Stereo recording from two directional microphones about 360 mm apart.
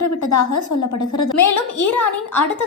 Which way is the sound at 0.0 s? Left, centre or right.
Left.